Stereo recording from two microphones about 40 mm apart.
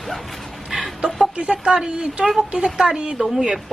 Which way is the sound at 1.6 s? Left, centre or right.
Right.